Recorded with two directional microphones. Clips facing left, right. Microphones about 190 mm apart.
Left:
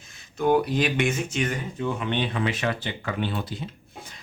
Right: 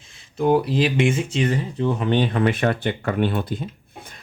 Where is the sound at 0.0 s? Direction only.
30° right (ahead or behind).